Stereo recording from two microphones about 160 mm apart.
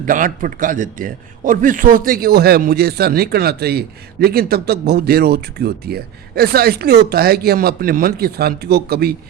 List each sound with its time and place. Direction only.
0.0 s a man's voice: 55° right (ahead or behind); by 9.1 s 80° right